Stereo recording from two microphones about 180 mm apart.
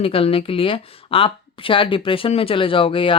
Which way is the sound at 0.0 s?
30° left (ahead or behind).